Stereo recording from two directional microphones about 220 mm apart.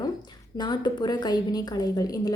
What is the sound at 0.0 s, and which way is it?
A woman's voice, 20° left (ahead or behind).